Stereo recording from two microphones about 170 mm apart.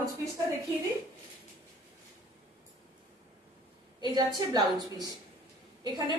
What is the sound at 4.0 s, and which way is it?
A woman's voice, 25° right (ahead or behind).